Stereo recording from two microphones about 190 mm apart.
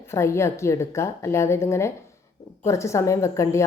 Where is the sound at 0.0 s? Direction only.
15° left (ahead or behind).